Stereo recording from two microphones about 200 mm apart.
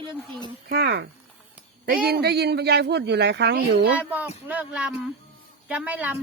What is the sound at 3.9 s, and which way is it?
A woman's voice, 10° right (ahead or behind).